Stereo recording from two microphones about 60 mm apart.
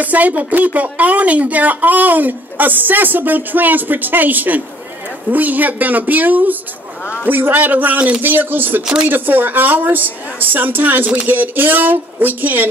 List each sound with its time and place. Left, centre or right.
0.0 s a woman's voice: right
8.8 s speech: centre
9.1 s a woman's voice: right